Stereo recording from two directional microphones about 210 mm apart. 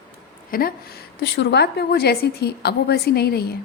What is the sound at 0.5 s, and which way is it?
A woman's voice, 45° left (ahead or behind).